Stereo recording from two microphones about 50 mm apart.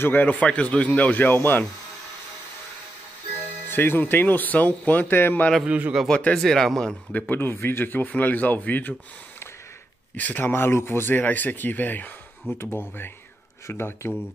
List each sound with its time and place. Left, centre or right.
0.0 s speech: left
3.6 s speech: left
5.7 s a man's voice: right
6.3 s speech: centre
7.1 s speech: left
7.3 s speech: left
10.1 s speech: left